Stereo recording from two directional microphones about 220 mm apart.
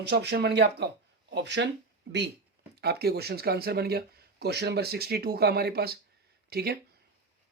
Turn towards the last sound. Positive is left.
turn(degrees=-45)  # may be behind; listen again after turning